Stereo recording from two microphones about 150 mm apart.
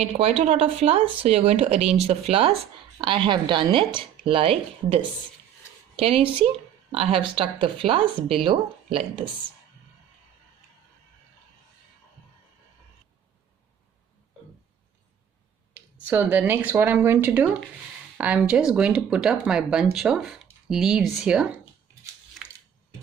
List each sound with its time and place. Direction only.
0.0 s speech: 40° right (ahead or behind)
15.7 s speech: 10° right (ahead or behind)